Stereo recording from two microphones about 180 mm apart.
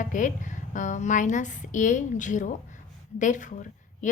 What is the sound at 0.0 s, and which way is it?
A woman's voice, 45° left (ahead or behind).